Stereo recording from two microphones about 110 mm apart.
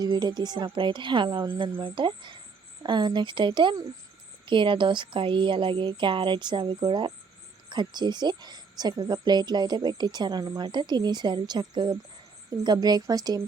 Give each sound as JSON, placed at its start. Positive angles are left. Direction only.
{"t": 0.0, "sound": "speech", "side_deg": -40}